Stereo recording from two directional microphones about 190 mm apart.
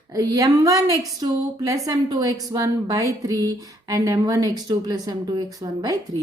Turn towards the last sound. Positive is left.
turn(degrees=-20)  # may be behind; listen again after turning